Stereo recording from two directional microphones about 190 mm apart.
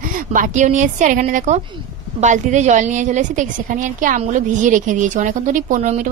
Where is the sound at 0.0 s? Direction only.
45° right (ahead or behind).